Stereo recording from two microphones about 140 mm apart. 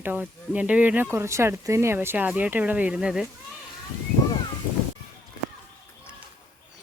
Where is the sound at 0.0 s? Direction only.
15° right (ahead or behind).